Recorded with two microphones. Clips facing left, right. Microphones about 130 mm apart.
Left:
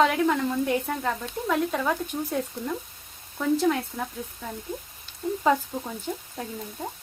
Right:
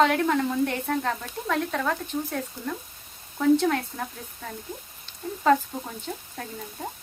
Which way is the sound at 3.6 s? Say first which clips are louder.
Left 1 dB; 5° left (ahead or behind).